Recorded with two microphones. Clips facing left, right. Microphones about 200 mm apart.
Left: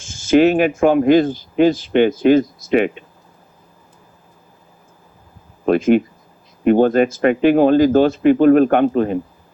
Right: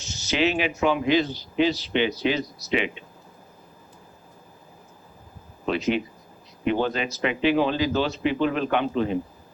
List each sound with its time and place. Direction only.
0.0 s speech: 50° left (ahead or behind)
5.6 s speech: 50° left (ahead or behind)